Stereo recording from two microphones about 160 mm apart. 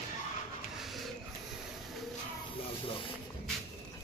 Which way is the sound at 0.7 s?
Centre (ahead or behind).